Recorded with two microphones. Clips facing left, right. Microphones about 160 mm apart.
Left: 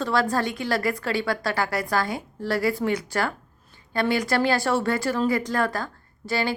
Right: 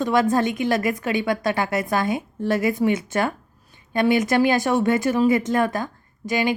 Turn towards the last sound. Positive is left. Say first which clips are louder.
# right 4 dB
turn(degrees=-15)  # may be behind; listen again after turning